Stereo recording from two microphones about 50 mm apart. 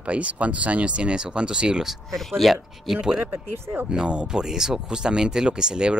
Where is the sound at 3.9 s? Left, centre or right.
Centre.